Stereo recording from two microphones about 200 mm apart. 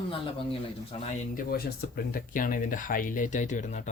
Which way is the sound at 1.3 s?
50° left (ahead or behind).